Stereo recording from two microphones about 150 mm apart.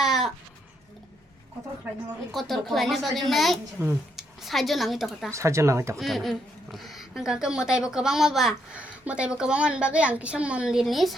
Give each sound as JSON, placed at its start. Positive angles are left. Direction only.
{"t": 0.0, "sound": "a sound", "side_deg": 0}
{"t": 2.3, "sound": "a woman's voice", "side_deg": 0}
{"t": 3.8, "sound": "speech", "side_deg": -10}
{"t": 4.4, "sound": "a woman's voice", "side_deg": 0}
{"t": 5.3, "sound": "speech", "side_deg": -20}
{"t": 6.0, "sound": "a woman's voice", "side_deg": 0}